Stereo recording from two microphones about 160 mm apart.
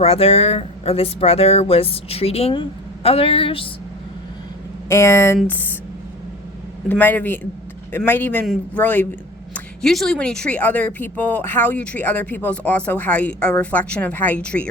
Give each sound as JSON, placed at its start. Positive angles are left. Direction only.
{"t": 0.0, "sound": "speech", "side_deg": 40}
{"t": 4.9, "sound": "speech", "side_deg": 15}
{"t": 6.8, "sound": "speech", "side_deg": 10}